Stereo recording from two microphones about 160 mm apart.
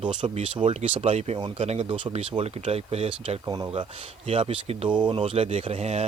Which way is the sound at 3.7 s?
35° right (ahead or behind).